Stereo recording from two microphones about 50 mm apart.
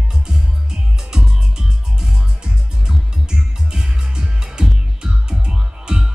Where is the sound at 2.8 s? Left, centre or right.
Centre.